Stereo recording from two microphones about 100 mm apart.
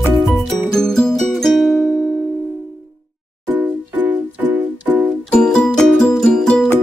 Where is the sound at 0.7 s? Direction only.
5° left (ahead or behind).